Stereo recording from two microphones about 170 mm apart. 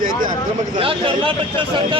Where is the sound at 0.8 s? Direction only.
30° right (ahead or behind).